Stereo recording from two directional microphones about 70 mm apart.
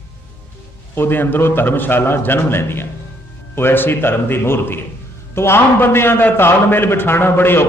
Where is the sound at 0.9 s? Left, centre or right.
Left.